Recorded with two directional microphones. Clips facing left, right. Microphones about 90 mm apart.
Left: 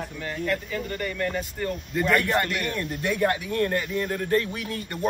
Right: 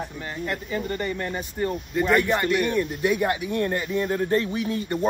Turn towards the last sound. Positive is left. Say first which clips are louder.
# right 6 dB
turn(degrees=-20)  # may be behind; listen again after turning